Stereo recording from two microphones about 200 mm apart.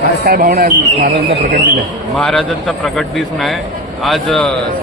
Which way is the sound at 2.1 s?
5° left (ahead or behind).